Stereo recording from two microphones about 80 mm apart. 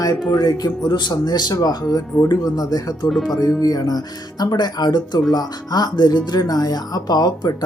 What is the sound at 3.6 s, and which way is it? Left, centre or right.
Speech, left.